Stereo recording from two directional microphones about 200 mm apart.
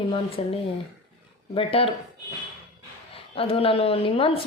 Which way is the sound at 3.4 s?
30° left (ahead or behind).